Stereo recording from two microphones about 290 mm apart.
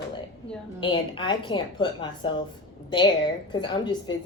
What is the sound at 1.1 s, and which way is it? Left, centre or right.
A woman's voice, centre.